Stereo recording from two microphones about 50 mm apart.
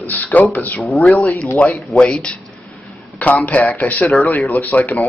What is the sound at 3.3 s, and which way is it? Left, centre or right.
Speech, left.